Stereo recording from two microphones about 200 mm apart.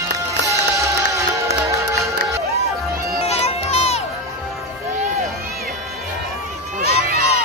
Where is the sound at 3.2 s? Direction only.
30° left (ahead or behind).